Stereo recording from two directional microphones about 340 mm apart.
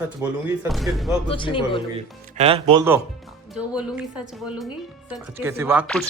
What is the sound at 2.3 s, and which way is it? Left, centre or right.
Speech, centre.